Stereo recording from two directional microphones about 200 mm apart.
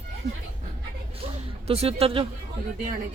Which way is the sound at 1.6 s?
30° right (ahead or behind).